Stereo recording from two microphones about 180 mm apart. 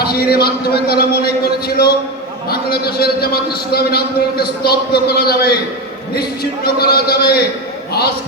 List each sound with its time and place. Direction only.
0.0 s a man's voice: 60° left (ahead or behind)